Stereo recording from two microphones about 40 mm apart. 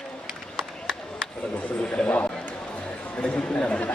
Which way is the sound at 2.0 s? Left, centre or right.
Left.